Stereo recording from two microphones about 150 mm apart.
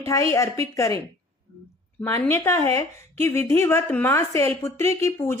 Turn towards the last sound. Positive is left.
turn(degrees=15)  # may be behind; listen again after turning